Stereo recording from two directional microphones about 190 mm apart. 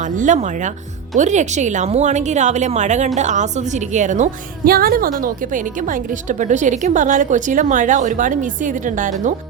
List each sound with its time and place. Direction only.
0.2 s a woman's voice: 40° right (ahead or behind)